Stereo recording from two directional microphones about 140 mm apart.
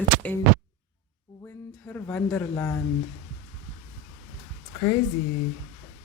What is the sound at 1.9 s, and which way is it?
Speech, 10° left (ahead or behind).